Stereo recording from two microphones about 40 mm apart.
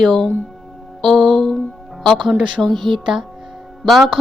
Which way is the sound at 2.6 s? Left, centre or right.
Right.